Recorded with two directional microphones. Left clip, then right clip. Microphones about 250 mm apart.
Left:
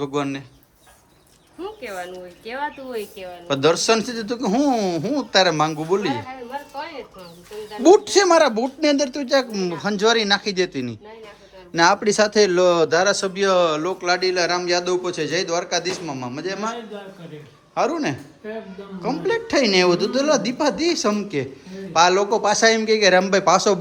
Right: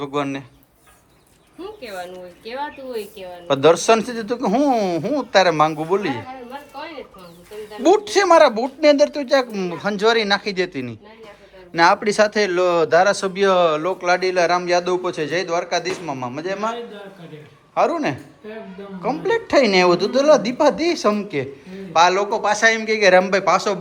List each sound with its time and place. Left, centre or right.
0.0 s a woman's voice: centre
1.6 s a woman's voice: centre
7.8 s a woman's voice: centre
17.7 s a woman's voice: centre